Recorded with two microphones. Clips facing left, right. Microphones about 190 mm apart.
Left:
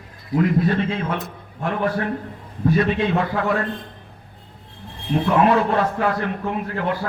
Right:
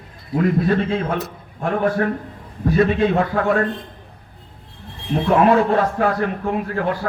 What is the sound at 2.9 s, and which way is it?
Speech, 50° right (ahead or behind).